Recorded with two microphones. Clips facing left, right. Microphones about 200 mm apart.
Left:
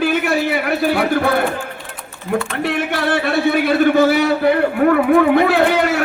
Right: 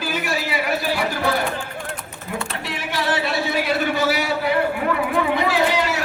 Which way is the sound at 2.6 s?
60° left (ahead or behind).